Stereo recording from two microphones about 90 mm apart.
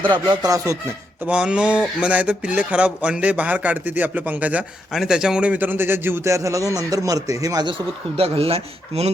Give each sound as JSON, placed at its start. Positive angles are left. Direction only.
{"t": 0.3, "sound": "speech", "side_deg": -40}
{"t": 1.2, "sound": "a man's voice", "side_deg": -10}
{"t": 7.6, "sound": "speech", "side_deg": -75}